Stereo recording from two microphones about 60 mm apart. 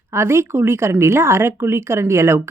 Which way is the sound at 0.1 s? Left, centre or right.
Right.